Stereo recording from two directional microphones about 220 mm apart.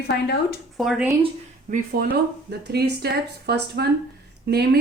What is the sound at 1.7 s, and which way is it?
A woman's voice, 45° right (ahead or behind).